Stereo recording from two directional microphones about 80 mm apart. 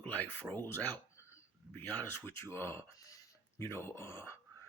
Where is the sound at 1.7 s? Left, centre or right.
Left.